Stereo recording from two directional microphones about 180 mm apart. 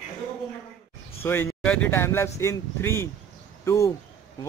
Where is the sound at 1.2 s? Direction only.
10° left (ahead or behind).